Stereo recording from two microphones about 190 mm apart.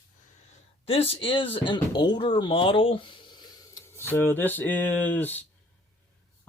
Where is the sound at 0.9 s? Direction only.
30° left (ahead or behind).